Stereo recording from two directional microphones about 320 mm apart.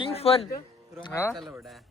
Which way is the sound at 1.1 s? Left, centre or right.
Centre.